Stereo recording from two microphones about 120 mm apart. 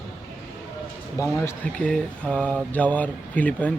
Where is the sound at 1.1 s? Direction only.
25° left (ahead or behind).